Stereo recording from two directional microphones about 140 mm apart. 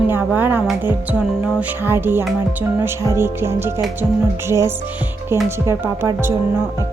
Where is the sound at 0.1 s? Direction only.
15° right (ahead or behind).